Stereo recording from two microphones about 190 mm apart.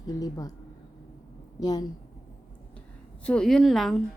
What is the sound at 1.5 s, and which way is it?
Speech, 20° left (ahead or behind).